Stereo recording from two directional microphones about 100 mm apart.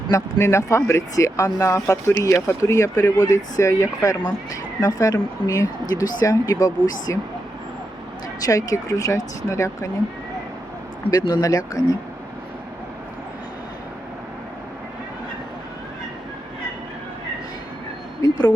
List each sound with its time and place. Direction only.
0.1 s speech: 25° left (ahead or behind)
8.4 s speech: 35° left (ahead or behind)
11.1 s speech: 35° left (ahead or behind)
18.2 s a sound: 35° left (ahead or behind)